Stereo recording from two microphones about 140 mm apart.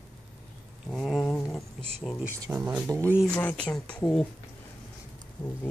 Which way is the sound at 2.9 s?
20° right (ahead or behind).